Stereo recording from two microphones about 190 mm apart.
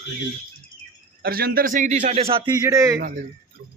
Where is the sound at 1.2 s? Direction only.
50° right (ahead or behind).